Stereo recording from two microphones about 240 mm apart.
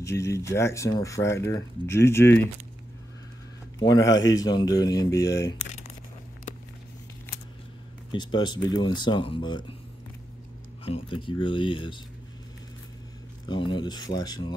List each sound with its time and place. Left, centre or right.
0.0 s speech: centre
3.8 s speech: centre
8.1 s speech: centre
10.9 s speech: left
13.5 s speech: centre